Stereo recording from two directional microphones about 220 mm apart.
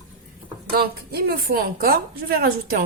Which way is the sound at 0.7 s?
45° right (ahead or behind).